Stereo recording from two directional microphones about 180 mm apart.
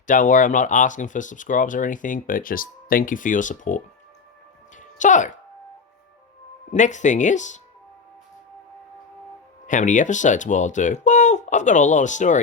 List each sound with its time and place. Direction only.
0.1 s speech: 45° left (ahead or behind)
4.8 s music: 45° left (ahead or behind)
6.7 s speech: 45° left (ahead or behind)
9.6 s speech: 45° left (ahead or behind)